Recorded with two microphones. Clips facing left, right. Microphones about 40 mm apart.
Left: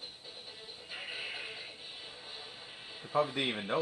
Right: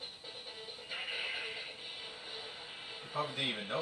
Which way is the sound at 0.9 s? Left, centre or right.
Centre.